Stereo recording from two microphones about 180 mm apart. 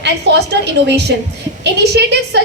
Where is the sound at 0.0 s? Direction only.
70° right (ahead or behind).